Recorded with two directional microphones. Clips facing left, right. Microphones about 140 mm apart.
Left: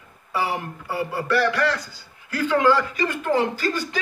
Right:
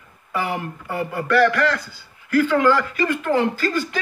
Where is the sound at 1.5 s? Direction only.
20° left (ahead or behind).